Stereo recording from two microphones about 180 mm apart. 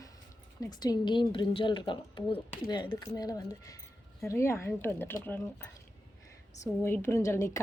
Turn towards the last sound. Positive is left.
turn(degrees=15)  # may be behind; listen again after turning